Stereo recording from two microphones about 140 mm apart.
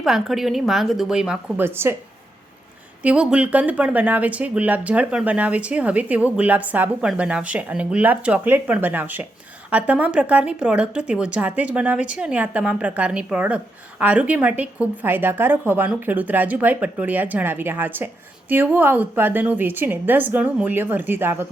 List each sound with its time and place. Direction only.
0.0 s a woman's voice: centre (ahead or behind)
1.6 s speech: 15° right (ahead or behind)
3.0 s speech: 10° right (ahead or behind)